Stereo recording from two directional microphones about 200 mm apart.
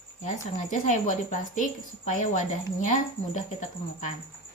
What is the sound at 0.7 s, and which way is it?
Speech, 40° left (ahead or behind).